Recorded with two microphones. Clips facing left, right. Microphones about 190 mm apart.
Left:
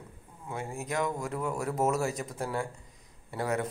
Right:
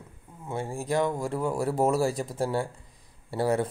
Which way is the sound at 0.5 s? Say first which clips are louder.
Right 6 dB; 30° right (ahead or behind).